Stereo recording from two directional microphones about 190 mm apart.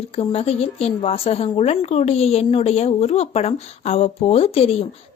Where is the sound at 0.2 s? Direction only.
30° left (ahead or behind).